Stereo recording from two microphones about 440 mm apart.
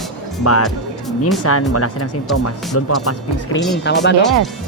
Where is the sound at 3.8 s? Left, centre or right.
Left.